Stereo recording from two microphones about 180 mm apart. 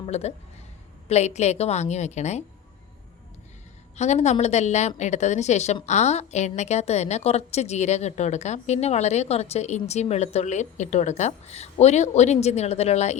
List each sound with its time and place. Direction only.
0.0 s a woman's voice: 35° left (ahead or behind)
3.9 s a woman's voice: 40° left (ahead or behind)